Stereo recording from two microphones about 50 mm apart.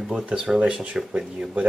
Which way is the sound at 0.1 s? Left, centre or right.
Centre.